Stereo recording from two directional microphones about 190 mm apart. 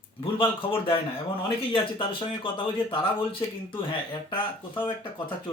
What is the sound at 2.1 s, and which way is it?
Speech, 25° left (ahead or behind).